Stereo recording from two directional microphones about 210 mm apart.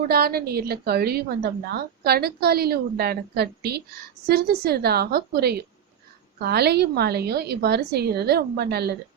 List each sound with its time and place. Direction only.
0.1 s a woman's voice: 45° right (ahead or behind)